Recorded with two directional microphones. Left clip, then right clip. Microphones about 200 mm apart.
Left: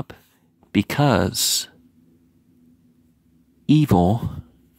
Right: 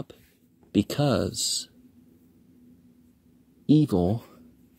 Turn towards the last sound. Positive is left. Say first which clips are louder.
# left 4 dB
turn(degrees=35)  # may be behind; listen again after turning